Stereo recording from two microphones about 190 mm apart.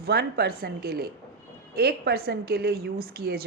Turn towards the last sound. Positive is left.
turn(degrees=-55)  # may be behind; listen again after turning